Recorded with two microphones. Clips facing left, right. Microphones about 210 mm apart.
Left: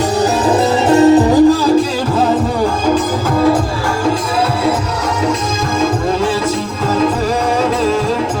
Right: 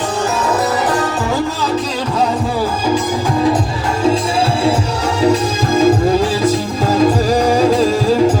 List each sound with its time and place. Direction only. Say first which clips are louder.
0.4 s music: left 4 dB; 25° left (ahead or behind)